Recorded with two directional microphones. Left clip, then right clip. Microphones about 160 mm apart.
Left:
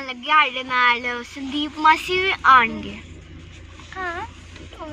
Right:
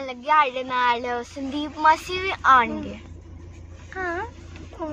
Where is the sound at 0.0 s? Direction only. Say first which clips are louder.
Left 2 dB; 15° right (ahead or behind).